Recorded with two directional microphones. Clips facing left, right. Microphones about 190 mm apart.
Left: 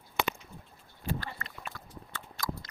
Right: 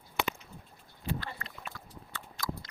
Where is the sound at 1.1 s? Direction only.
45° left (ahead or behind).